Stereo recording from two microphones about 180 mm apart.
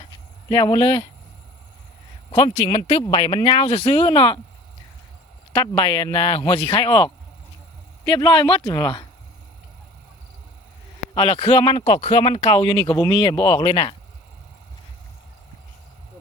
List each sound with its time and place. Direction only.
0.5 s speech: 25° left (ahead or behind)
2.3 s speech: 20° left (ahead or behind)
5.5 s speech: 25° left (ahead or behind)
11.1 s speech: 25° left (ahead or behind)